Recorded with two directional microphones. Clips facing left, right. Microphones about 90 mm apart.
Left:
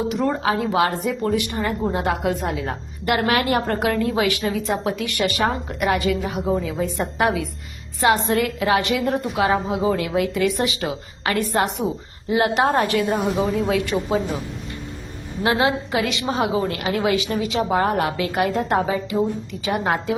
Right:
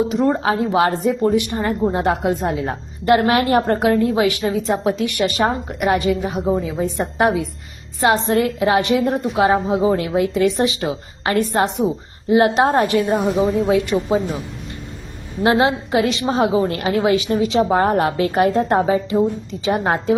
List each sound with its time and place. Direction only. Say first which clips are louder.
0.1 s a woman's voice: right 3 dB; 25° right (ahead or behind)
15.4 s a woman's voice: right 4 dB; 30° right (ahead or behind)